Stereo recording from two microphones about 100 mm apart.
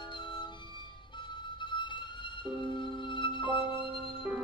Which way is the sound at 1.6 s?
50° left (ahead or behind).